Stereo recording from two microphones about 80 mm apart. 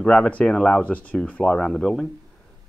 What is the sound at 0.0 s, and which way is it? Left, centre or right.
Speech, centre.